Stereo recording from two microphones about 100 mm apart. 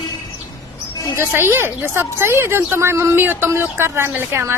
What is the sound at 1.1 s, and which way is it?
A woman's voice, 25° right (ahead or behind).